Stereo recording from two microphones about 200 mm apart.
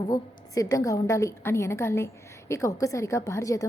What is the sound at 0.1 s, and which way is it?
A woman's voice, 15° left (ahead or behind).